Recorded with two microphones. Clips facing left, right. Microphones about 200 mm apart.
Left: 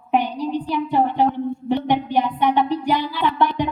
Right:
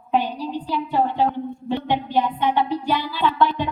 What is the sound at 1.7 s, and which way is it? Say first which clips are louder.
Music: left 3 dB; 15° left (ahead or behind).